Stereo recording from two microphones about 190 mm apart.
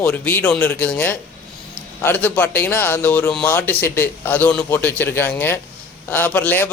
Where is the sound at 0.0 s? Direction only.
10° left (ahead or behind).